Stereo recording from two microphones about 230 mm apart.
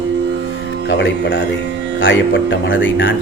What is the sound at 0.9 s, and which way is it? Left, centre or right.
Speech, left.